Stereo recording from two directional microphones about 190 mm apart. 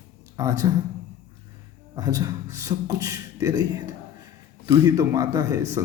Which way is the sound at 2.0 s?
20° right (ahead or behind).